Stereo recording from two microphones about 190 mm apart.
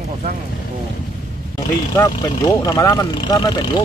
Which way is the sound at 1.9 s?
20° left (ahead or behind).